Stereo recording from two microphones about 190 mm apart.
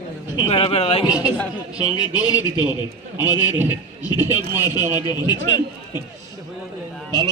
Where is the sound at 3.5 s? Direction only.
10° right (ahead or behind).